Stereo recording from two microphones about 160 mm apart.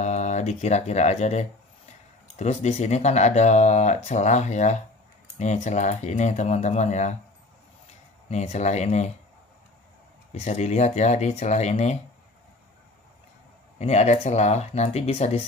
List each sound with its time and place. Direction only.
0.0 s speech: 45° left (ahead or behind)
8.3 s speech: 45° left (ahead or behind)
10.3 s speech: 45° left (ahead or behind)
13.7 s speech: 45° left (ahead or behind)